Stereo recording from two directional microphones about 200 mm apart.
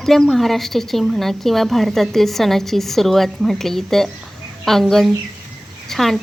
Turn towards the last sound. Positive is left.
turn(degrees=0)  # may be behind; listen again after turning